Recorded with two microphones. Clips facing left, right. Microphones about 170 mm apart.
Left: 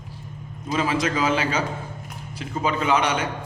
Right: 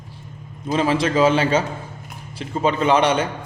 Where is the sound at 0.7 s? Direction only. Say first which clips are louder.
Right 4 dB; 30° right (ahead or behind).